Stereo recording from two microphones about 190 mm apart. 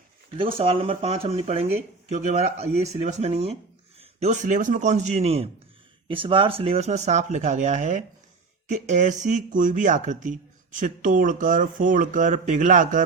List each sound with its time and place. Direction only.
0.5 s speech: 30° right (ahead or behind)